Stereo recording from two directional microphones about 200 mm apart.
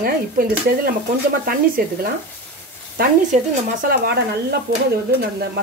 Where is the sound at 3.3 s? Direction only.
35° right (ahead or behind).